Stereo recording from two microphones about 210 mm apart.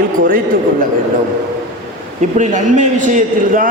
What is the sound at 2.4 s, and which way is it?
A man's voice, 35° right (ahead or behind).